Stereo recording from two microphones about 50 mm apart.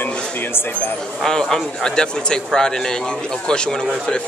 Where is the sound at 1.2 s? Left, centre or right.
Centre.